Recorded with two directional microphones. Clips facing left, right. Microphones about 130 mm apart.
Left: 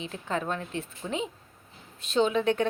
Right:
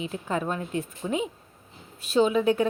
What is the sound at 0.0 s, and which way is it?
A woman's voice, 10° right (ahead or behind).